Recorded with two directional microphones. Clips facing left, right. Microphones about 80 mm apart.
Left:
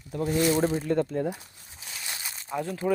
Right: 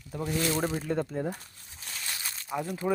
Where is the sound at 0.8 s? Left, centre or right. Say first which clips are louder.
Left 4 dB; centre.